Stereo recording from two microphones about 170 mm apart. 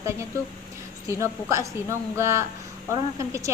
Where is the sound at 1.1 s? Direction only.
15° right (ahead or behind).